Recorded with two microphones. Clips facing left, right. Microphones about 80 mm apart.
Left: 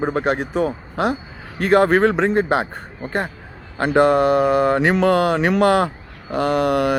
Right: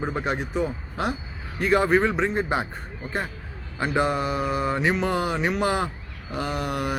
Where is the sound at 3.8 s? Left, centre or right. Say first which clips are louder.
Left 9 dB; left.